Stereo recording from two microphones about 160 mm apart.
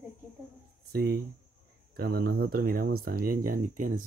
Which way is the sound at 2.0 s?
75° right (ahead or behind).